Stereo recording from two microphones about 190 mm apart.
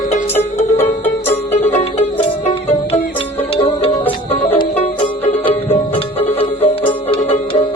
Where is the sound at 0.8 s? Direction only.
10° left (ahead or behind).